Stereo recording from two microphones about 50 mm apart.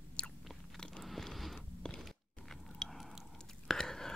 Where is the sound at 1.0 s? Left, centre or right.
Centre.